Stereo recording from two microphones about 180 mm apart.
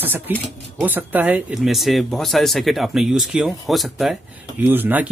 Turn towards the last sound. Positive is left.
turn(degrees=-10)  # may be behind; listen again after turning